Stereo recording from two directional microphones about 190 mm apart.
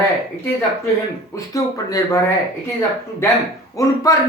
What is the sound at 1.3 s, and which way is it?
Speech, 15° left (ahead or behind).